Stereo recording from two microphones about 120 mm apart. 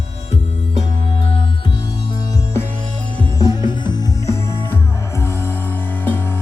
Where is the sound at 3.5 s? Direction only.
40° left (ahead or behind).